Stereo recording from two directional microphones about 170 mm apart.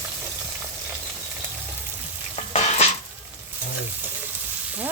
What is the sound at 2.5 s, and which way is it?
Frying, 40° left (ahead or behind).